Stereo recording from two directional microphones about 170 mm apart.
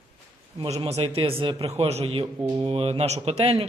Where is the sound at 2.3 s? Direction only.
25° right (ahead or behind).